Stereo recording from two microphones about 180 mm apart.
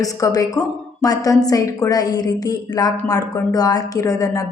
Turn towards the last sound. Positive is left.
turn(degrees=20)  # may be behind; listen again after turning